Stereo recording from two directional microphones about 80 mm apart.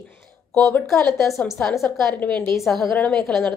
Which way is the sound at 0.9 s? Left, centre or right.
Centre.